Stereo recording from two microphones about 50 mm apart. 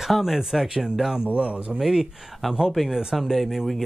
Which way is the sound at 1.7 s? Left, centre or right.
Centre.